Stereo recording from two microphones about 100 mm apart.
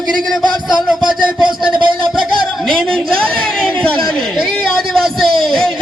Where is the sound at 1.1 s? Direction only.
55° right (ahead or behind).